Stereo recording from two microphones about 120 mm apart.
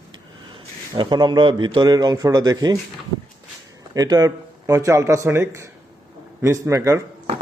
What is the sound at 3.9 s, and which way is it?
A man's voice, 30° right (ahead or behind).